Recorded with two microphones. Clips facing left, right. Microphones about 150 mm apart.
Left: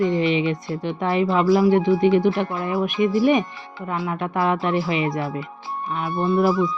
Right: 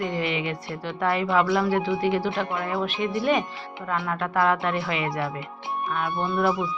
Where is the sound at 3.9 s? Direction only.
20° left (ahead or behind).